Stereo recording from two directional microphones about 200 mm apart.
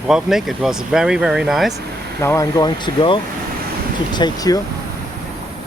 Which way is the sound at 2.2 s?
15° left (ahead or behind).